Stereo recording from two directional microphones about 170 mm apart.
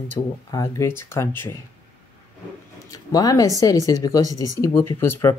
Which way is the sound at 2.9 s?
20° left (ahead or behind).